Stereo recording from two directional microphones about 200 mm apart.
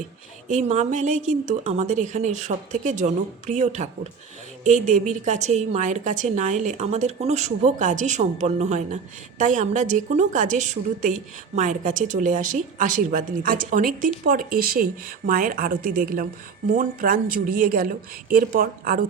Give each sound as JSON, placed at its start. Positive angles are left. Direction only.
{"t": 0.4, "sound": "a woman's voice", "side_deg": -35}